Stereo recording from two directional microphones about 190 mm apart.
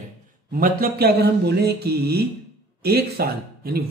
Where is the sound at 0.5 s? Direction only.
50° right (ahead or behind).